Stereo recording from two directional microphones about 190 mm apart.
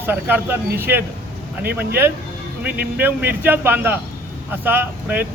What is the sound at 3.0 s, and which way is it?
Speech, 10° right (ahead or behind).